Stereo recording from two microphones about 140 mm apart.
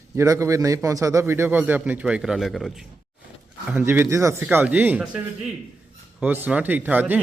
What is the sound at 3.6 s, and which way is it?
A man's voice, 10° right (ahead or behind).